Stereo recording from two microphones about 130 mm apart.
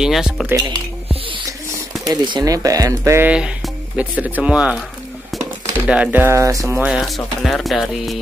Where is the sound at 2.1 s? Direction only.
30° right (ahead or behind).